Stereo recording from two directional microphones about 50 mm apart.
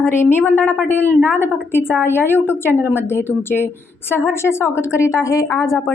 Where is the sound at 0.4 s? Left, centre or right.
Left.